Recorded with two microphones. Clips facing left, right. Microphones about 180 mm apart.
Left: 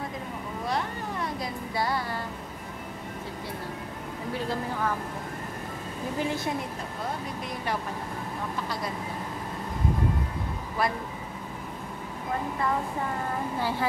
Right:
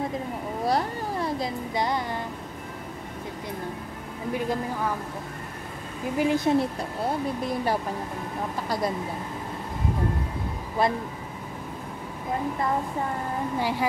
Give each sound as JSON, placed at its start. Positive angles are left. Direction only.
{"t": 0.7, "sound": "a sound", "side_deg": -35}
{"t": 1.8, "sound": "music", "side_deg": -20}
{"t": 4.3, "sound": "speech", "side_deg": -15}
{"t": 6.1, "sound": "speech", "side_deg": -20}
{"t": 10.8, "sound": "music", "side_deg": -25}
{"t": 13.6, "sound": "speech", "side_deg": -15}